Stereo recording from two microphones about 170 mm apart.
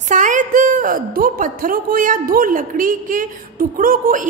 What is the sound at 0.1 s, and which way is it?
A woman's voice, 50° right (ahead or behind).